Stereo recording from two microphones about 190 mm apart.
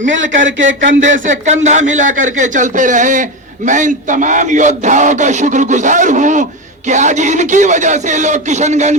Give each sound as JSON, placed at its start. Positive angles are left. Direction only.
{"t": 0.0, "sound": "speech", "side_deg": -80}
{"t": 1.3, "sound": "a man's voice", "side_deg": -40}